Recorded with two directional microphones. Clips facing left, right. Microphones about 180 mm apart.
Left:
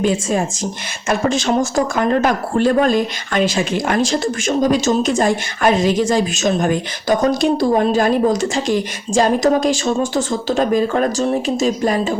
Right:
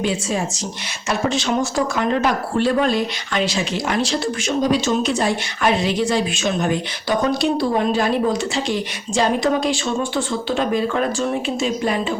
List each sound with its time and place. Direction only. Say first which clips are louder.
0.0 s speech: left 4 dB; 50° left (ahead or behind)